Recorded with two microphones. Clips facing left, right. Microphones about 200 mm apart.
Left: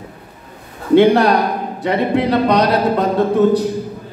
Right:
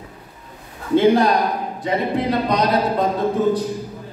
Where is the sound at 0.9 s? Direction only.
70° left (ahead or behind).